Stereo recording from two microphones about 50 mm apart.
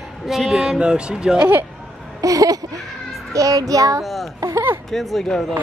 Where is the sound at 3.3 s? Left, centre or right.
Right.